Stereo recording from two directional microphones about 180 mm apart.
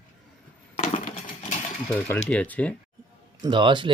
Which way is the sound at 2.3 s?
10° left (ahead or behind).